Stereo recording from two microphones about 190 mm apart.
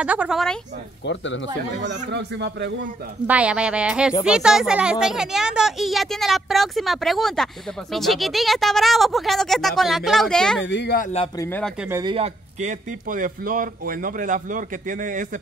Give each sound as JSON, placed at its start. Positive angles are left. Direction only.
{"t": 0.0, "sound": "speech", "side_deg": -5}
{"t": 1.0, "sound": "speech", "side_deg": 75}
{"t": 2.1, "sound": "speech", "side_deg": -65}
{"t": 3.3, "sound": "speech", "side_deg": -5}
{"t": 10.6, "sound": "speech", "side_deg": 70}
{"t": 11.3, "sound": "a man's voice", "side_deg": 10}
{"t": 12.0, "sound": "speech", "side_deg": -25}
{"t": 12.5, "sound": "speech", "side_deg": -40}